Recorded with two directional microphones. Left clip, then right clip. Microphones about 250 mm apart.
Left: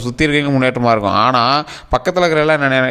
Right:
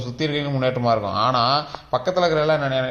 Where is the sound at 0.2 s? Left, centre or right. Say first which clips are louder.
Left 9 dB; left.